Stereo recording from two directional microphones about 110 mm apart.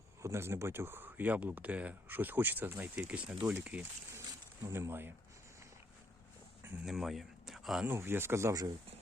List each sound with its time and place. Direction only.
0.2 s speech: 25° right (ahead or behind)
4.6 s speech: 25° right (ahead or behind)
6.8 s speech: 5° right (ahead or behind)
7.9 s speech: 20° right (ahead or behind)